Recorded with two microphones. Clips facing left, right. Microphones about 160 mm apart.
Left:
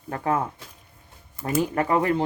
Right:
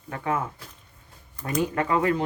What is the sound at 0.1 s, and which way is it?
Speech, 35° left (ahead or behind).